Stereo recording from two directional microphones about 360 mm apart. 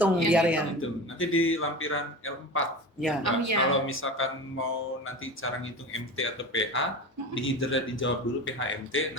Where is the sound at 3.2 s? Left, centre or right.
Right.